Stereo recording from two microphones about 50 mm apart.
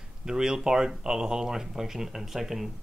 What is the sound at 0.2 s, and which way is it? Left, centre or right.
Speech, centre.